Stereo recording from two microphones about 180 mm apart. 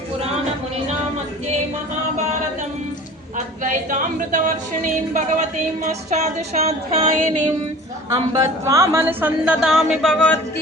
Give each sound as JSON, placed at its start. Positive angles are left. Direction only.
{"t": 3.3, "sound": "speech", "side_deg": -45}
{"t": 8.3, "sound": "speech", "side_deg": -15}
{"t": 9.6, "sound": "a sound", "side_deg": 0}